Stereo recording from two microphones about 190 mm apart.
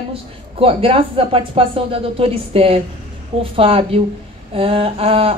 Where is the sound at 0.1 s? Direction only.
30° right (ahead or behind).